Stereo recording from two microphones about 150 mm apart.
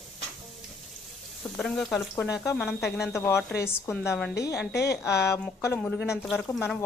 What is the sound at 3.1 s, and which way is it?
Speech, 20° left (ahead or behind).